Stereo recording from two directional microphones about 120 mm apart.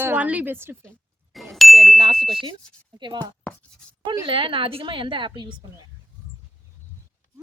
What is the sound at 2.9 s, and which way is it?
Speech, 40° right (ahead or behind).